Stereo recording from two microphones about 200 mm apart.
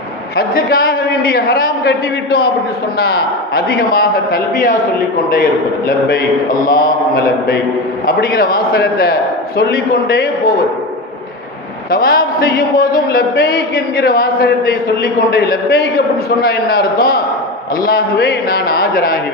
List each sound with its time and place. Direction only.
0.5 s a man's voice: 50° left (ahead or behind)
6.6 s mantra: 20° left (ahead or behind)
8.0 s a man's voice: 45° left (ahead or behind)
11.9 s a man's voice: 45° left (ahead or behind)